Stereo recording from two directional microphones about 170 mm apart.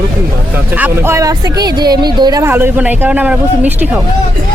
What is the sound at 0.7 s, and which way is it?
Speech, 10° right (ahead or behind).